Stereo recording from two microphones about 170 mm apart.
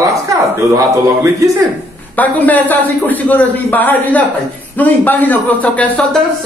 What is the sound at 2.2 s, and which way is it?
A man's voice, 10° left (ahead or behind).